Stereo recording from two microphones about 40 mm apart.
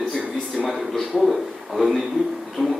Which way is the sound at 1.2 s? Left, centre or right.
Centre.